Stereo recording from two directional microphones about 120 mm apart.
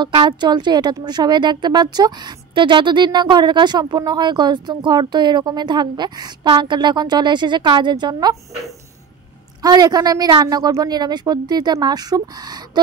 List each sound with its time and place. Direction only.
0.0 s a woman's voice: 40° right (ahead or behind)
9.6 s a woman's voice: 30° right (ahead or behind)